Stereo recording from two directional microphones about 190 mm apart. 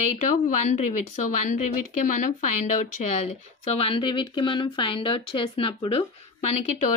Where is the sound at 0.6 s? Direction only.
40° left (ahead or behind).